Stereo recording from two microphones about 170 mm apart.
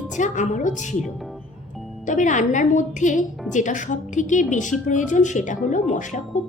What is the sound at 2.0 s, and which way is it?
A woman's voice, 45° left (ahead or behind).